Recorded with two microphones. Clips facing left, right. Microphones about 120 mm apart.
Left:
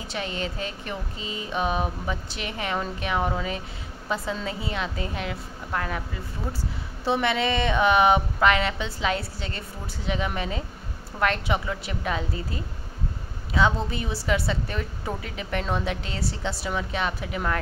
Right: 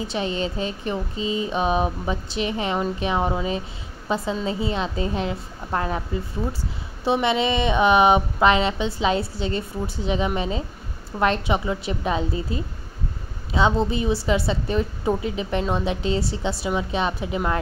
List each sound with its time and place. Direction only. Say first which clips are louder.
0.0 s a woman's voice: right 6 dB; 20° right (ahead or behind)
7.1 s a woman's voice: right 3 dB; 20° right (ahead or behind)